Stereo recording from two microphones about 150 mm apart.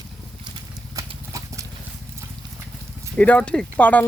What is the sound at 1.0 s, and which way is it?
Horse, 20° right (ahead or behind).